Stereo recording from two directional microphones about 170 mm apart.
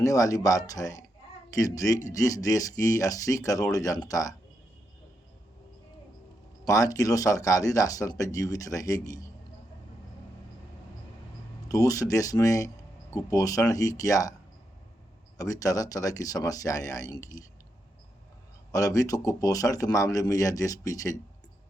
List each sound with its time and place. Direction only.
0.0 s speech: 20° left (ahead or behind)
6.7 s speech: 20° left (ahead or behind)
11.7 s speech: 20° left (ahead or behind)
15.4 s speech: 20° left (ahead or behind)
18.7 s speech: 20° left (ahead or behind)